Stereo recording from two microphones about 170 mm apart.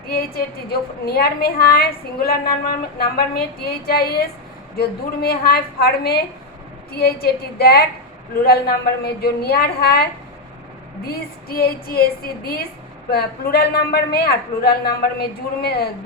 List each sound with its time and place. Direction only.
0.1 s a woman's voice: 65° left (ahead or behind)
9.0 s a man's voice: 70° left (ahead or behind)